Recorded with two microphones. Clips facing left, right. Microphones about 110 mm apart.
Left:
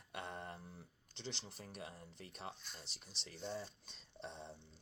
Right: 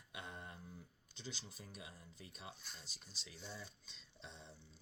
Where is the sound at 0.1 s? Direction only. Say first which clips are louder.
Left 5 dB; 65° left (ahead or behind).